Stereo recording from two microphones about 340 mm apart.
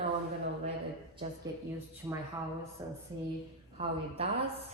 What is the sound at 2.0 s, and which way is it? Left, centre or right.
A woman's voice, centre.